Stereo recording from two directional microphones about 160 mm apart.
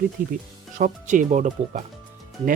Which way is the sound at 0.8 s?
55° right (ahead or behind).